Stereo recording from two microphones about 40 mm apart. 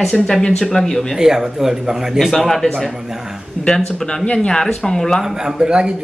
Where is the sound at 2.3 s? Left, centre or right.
Centre.